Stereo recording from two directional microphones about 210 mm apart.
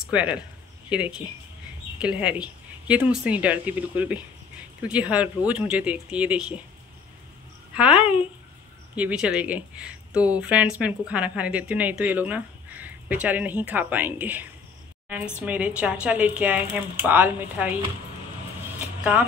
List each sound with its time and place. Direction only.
0.0 s speech: 5° right (ahead or behind)
7.7 s speech: 5° right (ahead or behind)
8.0 s speech: 25° left (ahead or behind)
8.9 s speech: 5° right (ahead or behind)